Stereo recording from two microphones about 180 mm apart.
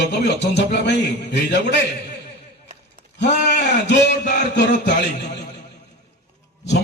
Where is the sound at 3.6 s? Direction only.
65° left (ahead or behind).